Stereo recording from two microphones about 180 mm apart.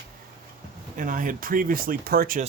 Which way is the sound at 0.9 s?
50° right (ahead or behind).